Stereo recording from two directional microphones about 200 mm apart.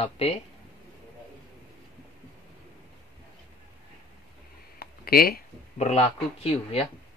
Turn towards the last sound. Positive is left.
turn(degrees=30)  # may be behind; listen again after turning